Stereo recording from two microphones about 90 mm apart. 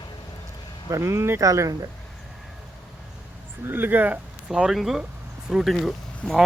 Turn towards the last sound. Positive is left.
turn(degrees=0)  # may be behind; listen again after turning